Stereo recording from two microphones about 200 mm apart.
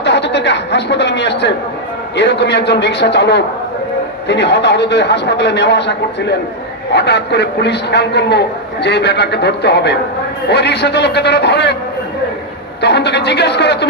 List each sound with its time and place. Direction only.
0.0 s a sound: 60° left (ahead or behind)
2.1 s a man's voice: 60° left (ahead or behind)
12.8 s a man's voice: 55° left (ahead or behind)